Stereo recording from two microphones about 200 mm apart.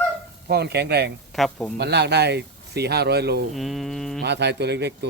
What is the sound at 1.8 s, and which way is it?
Speech, 55° right (ahead or behind).